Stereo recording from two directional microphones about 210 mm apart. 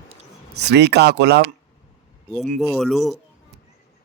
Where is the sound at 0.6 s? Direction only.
55° right (ahead or behind).